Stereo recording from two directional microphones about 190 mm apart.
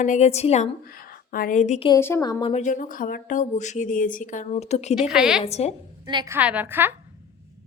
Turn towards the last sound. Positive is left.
turn(degrees=-10)  # may be behind; listen again after turning